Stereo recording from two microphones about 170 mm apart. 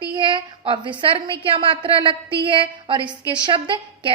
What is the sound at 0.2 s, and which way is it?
A woman's voice, 30° right (ahead or behind).